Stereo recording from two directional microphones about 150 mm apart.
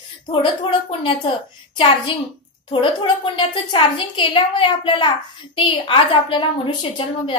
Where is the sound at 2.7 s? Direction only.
35° left (ahead or behind).